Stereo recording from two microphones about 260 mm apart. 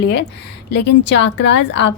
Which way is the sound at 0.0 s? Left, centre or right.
Left.